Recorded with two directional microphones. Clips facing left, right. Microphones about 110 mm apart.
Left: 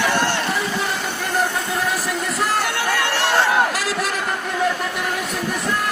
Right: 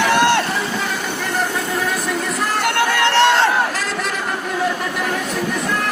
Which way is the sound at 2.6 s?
65° right (ahead or behind).